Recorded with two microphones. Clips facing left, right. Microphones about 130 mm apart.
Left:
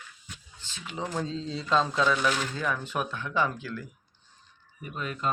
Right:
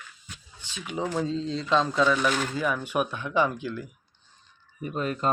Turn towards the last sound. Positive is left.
turn(degrees=-40)  # may be behind; listen again after turning